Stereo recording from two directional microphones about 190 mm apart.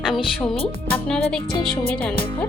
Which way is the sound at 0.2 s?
30° left (ahead or behind).